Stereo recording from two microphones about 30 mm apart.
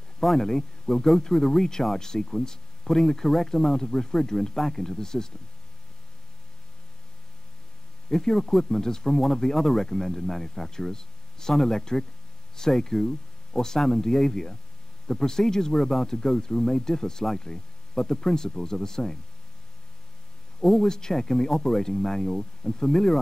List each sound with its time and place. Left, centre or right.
0.4 s speech: centre
8.1 s speech: centre
20.6 s speech: centre
20.9 s speech: centre